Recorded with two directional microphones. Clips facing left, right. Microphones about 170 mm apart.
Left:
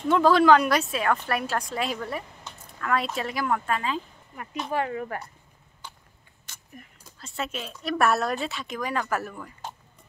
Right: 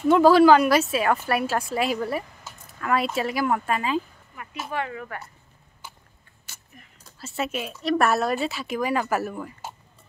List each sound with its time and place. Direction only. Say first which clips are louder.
0.1 s a woman's voice: right 3 dB; 5° right (ahead or behind)
4.6 s speech: left 3 dB; 35° left (ahead or behind)
5.8 s a sound: even; 10° right (ahead or behind)
7.2 s a woman's voice: right 4 dB; 5° right (ahead or behind)